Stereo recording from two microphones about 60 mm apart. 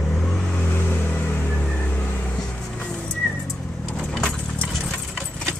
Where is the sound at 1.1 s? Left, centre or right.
Left.